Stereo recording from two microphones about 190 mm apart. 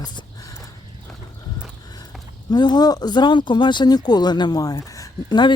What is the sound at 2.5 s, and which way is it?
Speech, 20° left (ahead or behind).